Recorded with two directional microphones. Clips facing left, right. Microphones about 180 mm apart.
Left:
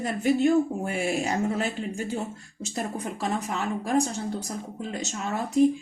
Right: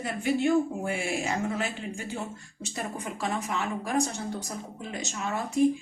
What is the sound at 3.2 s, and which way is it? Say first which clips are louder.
Speech: left 1 dB; 35° left (ahead or behind).